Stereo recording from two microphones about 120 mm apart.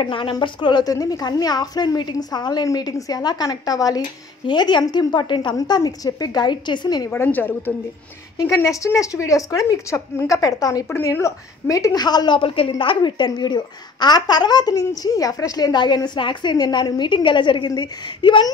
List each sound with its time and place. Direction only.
0.0 s speech: 45° left (ahead or behind)
7.1 s a woman's voice: 15° left (ahead or behind); by 18.5 s 40° left (ahead or behind)